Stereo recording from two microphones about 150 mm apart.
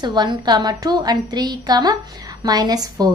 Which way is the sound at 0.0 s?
30° right (ahead or behind).